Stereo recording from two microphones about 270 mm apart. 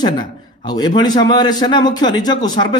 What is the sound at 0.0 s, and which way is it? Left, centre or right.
Speech, centre.